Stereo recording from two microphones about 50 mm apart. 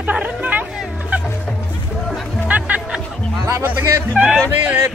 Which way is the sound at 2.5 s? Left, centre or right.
Right.